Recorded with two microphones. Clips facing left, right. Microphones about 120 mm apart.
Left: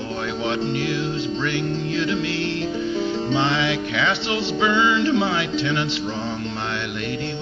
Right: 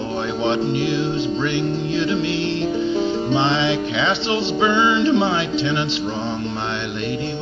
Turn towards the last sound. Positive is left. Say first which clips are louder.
# right 2 dB
turn(degrees=-25)  # may be behind; listen again after turning